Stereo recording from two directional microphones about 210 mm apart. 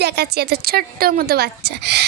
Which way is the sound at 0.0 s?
50° right (ahead or behind).